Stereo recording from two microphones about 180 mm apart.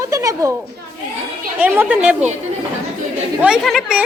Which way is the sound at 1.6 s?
10° right (ahead or behind).